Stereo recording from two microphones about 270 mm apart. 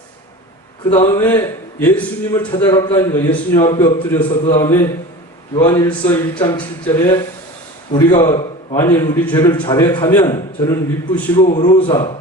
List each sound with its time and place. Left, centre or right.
0.9 s a man's voice: centre
1.2 s a man's voice: centre
8.1 s a man's voice: left
8.7 s a man's voice: centre
11.4 s a man's voice: centre